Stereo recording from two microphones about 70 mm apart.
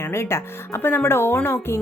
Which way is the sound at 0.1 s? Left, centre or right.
Left.